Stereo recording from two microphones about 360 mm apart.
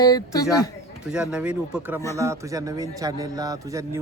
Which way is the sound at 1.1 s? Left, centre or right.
Centre.